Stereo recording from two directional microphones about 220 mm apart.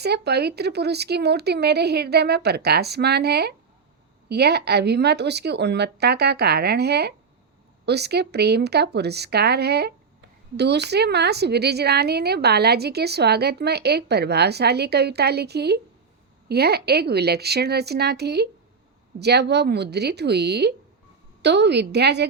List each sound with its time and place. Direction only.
0.0 s speech: 50° right (ahead or behind)